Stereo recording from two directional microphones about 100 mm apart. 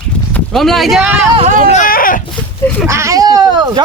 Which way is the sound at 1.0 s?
15° right (ahead or behind).